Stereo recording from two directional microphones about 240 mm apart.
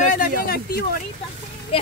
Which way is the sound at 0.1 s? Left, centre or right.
Left.